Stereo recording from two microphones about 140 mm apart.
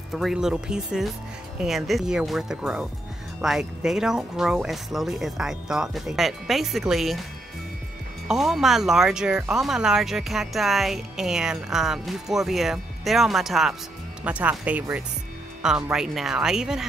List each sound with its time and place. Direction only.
0.1 s speech: 5° right (ahead or behind)
8.3 s speech: centre (ahead or behind)